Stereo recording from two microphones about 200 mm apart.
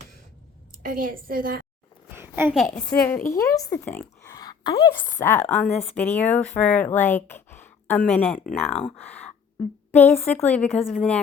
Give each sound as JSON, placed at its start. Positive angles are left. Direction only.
{"t": 0.8, "sound": "a woman's voice", "side_deg": -45}
{"t": 2.1, "sound": "a sound", "side_deg": -10}
{"t": 2.6, "sound": "a woman's voice", "side_deg": 5}
{"t": 5.2, "sound": "speech", "side_deg": 10}